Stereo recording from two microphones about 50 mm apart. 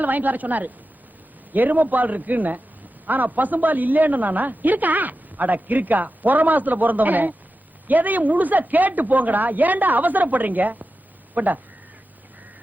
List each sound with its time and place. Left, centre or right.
0.0 s a woman's voice: right